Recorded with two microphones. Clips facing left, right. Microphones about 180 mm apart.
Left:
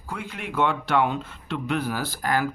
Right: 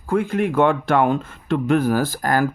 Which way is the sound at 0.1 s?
50° right (ahead or behind).